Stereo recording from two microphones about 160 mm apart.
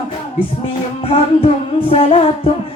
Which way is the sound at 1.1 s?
35° left (ahead or behind).